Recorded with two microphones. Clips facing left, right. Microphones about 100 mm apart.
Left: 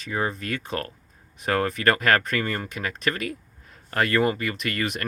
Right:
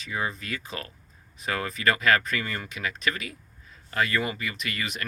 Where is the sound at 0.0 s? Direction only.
45° left (ahead or behind).